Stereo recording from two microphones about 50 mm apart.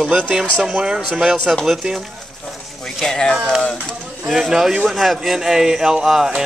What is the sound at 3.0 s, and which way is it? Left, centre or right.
Speech, centre.